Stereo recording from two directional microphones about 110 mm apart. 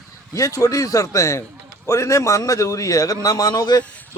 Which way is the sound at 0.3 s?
30° left (ahead or behind).